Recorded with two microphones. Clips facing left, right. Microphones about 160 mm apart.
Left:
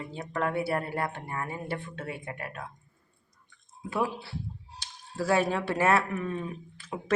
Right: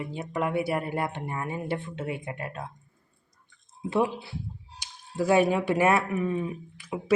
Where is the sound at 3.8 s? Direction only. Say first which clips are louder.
Right 4 dB; 20° right (ahead or behind).